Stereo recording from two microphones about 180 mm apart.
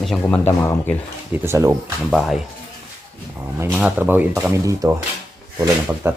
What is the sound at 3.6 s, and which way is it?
Speech, 5° right (ahead or behind).